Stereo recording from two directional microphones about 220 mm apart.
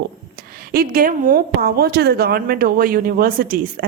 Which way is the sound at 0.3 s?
40° right (ahead or behind).